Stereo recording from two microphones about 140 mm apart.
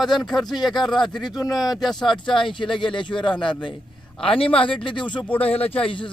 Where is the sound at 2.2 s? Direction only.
35° left (ahead or behind).